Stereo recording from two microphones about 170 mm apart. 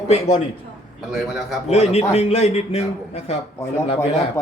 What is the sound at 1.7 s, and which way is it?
Speech, 40° left (ahead or behind).